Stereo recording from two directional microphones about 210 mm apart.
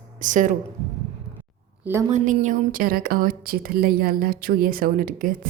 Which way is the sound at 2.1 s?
35° right (ahead or behind).